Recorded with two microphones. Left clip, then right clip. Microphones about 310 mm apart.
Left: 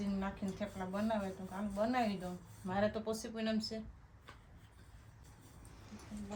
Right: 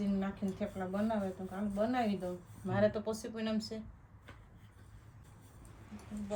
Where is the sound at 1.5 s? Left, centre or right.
Centre.